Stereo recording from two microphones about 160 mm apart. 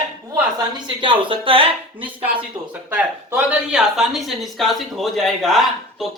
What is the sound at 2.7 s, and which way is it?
Speech, 10° right (ahead or behind).